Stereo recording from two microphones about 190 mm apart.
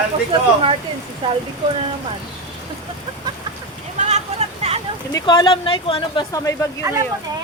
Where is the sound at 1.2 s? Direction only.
25° right (ahead or behind).